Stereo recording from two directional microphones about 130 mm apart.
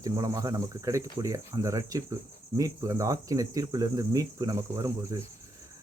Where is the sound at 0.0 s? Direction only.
25° right (ahead or behind).